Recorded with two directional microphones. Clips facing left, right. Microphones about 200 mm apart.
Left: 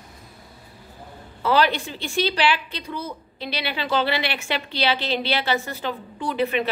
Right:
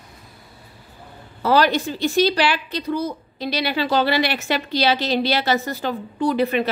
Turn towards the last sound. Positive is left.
turn(degrees=-40)  # may be behind; listen again after turning